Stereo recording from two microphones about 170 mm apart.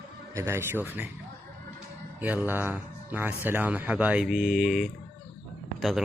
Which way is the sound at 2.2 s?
10° right (ahead or behind).